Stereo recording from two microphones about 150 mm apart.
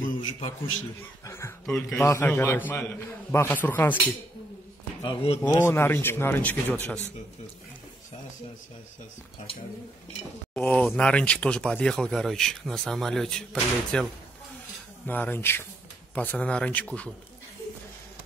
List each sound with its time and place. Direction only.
0.0 s a sound: 60° left (ahead or behind)
1.2 s speech: 20° left (ahead or behind)
1.7 s speech: 5° left (ahead or behind)
5.6 s speech: 15° left (ahead or behind)
10.5 s speech: 10° left (ahead or behind)
15.0 s speech: 10° left (ahead or behind)